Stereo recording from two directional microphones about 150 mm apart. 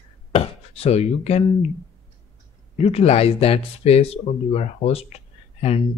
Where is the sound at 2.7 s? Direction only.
45° left (ahead or behind).